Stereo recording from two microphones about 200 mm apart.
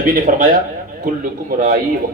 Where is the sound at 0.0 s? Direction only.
45° right (ahead or behind).